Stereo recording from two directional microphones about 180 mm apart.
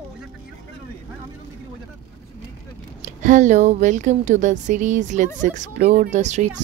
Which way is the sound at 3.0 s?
45° right (ahead or behind).